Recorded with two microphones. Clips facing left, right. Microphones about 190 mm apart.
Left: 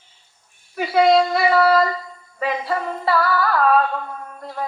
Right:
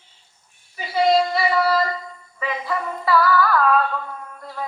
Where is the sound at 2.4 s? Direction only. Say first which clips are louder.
Left 3 dB; 35° left (ahead or behind).